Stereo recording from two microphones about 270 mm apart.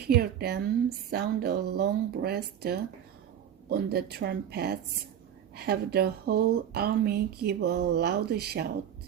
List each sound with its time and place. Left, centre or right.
0.1 s speech: right